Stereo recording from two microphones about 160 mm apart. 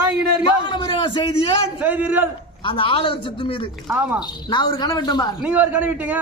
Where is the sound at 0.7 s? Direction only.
30° left (ahead or behind).